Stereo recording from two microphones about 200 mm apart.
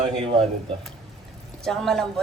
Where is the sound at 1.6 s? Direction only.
Centre (ahead or behind).